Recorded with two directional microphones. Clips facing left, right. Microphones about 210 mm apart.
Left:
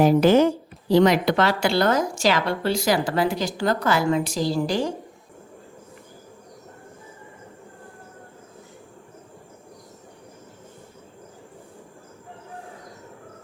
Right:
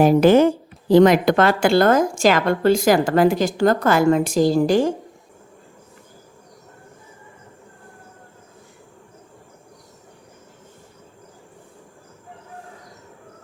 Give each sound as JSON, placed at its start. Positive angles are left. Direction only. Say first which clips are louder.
{"t": 0.0, "sound": "speech", "louder": "right 3 dB", "side_deg": -50}